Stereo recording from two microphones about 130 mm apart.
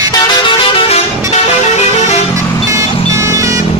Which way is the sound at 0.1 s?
40° left (ahead or behind).